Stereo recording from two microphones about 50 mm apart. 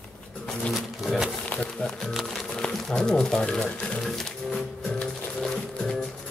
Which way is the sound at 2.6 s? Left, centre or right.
Centre.